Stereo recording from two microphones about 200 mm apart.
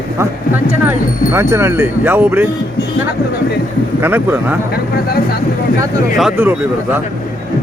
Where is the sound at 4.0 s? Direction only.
10° right (ahead or behind).